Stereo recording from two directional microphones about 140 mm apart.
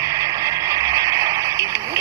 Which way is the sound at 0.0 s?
25° right (ahead or behind).